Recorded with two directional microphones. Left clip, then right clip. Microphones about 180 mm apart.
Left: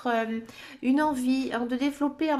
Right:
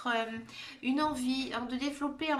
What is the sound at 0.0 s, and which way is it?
Speech, 35° left (ahead or behind).